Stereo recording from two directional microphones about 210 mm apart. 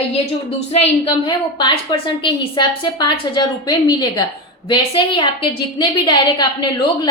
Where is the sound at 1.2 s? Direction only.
25° left (ahead or behind).